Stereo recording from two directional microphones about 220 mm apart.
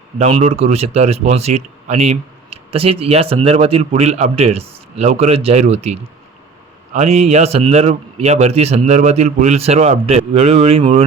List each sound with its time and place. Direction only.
0.2 s a man's voice: 30° right (ahead or behind)